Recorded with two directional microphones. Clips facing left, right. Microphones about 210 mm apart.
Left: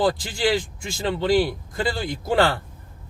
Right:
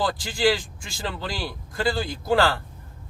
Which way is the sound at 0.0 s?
25° left (ahead or behind).